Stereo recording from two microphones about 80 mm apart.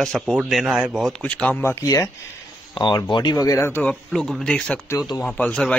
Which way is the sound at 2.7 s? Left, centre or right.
Left.